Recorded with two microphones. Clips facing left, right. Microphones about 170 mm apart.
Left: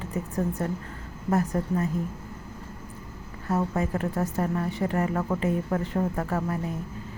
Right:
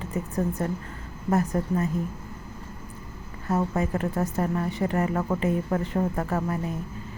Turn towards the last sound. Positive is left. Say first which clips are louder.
# right 1 dB
turn(degrees=-20)  # may be behind; listen again after turning